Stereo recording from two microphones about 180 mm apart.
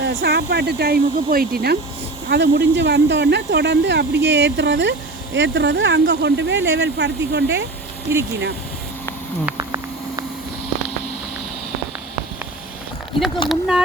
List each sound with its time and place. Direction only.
0.0 s speech: 60° right (ahead or behind)
2.3 s speech: 70° right (ahead or behind)
8.1 s speech: 15° right (ahead or behind)
9.6 s a sound: 20° right (ahead or behind)
13.5 s speech: 5° right (ahead or behind)